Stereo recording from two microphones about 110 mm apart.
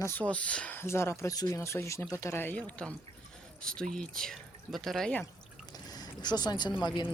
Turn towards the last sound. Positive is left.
turn(degrees=45)  # may be behind; listen again after turning